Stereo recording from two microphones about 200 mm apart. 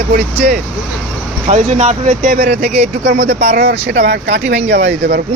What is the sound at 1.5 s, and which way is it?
Speech, 35° right (ahead or behind).